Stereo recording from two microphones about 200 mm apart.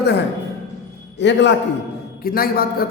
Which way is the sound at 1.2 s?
60° left (ahead or behind).